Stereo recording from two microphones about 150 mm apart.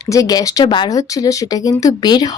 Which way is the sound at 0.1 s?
25° left (ahead or behind).